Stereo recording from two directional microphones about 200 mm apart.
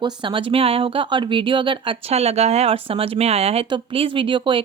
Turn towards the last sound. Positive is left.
turn(degrees=-25)  # may be behind; listen again after turning